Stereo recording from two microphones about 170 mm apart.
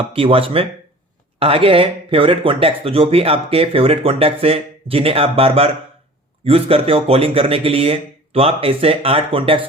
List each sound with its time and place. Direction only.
0.1 s speech: 30° right (ahead or behind)